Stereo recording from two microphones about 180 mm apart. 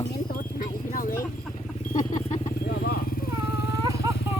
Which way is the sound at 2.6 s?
55° left (ahead or behind).